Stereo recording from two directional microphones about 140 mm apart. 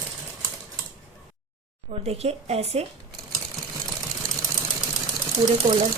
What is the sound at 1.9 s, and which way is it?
Speech, 45° right (ahead or behind).